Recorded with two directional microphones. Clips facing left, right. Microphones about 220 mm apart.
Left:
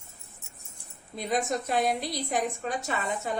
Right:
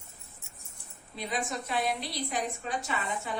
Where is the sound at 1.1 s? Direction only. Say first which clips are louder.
Left 6 dB; 45° left (ahead or behind).